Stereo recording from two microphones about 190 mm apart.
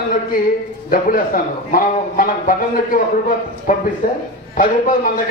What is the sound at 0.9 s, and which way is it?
A man's voice, 45° left (ahead or behind).